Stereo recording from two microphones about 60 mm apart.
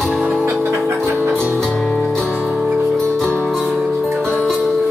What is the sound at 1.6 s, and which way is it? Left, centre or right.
Music, centre.